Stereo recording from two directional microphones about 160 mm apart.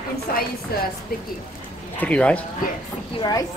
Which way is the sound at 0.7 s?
70° left (ahead or behind).